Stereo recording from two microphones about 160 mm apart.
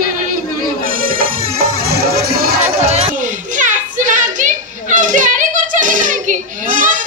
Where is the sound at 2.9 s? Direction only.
45° right (ahead or behind).